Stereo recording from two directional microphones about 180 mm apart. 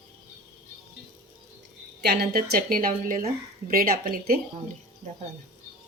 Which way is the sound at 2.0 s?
60° right (ahead or behind).